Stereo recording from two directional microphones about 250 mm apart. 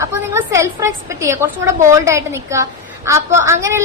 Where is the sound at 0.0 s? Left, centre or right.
Centre.